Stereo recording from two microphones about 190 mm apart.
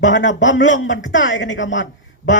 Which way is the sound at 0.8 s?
75° left (ahead or behind).